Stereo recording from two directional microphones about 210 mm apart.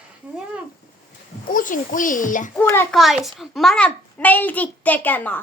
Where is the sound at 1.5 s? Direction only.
40° left (ahead or behind).